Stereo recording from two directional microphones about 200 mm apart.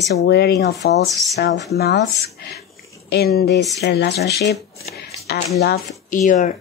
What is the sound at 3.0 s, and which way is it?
Speech, 50° left (ahead or behind).